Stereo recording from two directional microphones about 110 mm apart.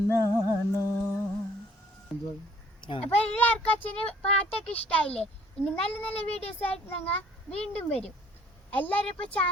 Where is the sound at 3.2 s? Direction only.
15° left (ahead or behind).